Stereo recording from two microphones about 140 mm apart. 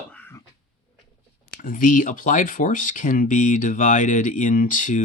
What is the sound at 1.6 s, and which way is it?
Speech, 70° left (ahead or behind).